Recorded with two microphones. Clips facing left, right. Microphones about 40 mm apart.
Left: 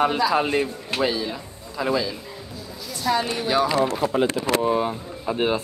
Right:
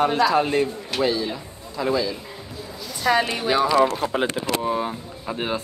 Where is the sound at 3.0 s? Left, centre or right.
Right.